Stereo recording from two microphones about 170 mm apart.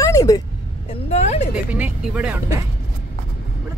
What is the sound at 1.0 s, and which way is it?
Speech, 40° left (ahead or behind).